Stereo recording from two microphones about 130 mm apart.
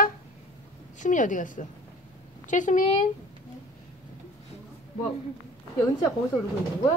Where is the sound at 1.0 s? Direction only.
80° left.